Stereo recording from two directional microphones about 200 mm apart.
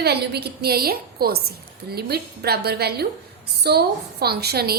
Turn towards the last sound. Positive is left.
turn(degrees=-50)  # may be behind; listen again after turning